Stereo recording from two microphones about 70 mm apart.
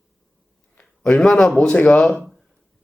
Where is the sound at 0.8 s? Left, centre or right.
Centre.